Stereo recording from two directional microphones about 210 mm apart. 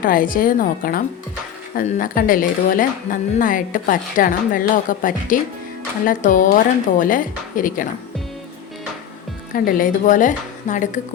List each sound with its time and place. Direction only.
0.0 s a woman's voice: 40° left (ahead or behind)
9.5 s a woman's voice: 40° left (ahead or behind)